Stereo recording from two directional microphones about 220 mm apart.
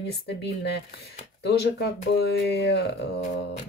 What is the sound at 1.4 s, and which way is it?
Speech, 50° left (ahead or behind).